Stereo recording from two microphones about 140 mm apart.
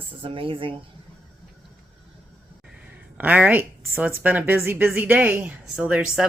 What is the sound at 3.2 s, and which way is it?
A woman's voice, 10° right (ahead or behind).